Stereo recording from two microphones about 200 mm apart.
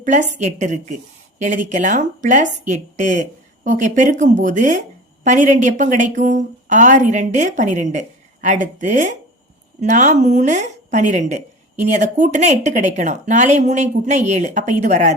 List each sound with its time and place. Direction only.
0.0 s a woman's voice: 40° right (ahead or behind)